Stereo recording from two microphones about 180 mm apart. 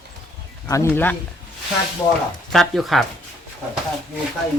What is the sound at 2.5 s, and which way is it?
Speech, centre (ahead or behind).